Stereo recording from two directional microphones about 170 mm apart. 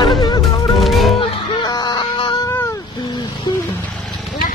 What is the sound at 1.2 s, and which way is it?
Music, 25° left (ahead or behind).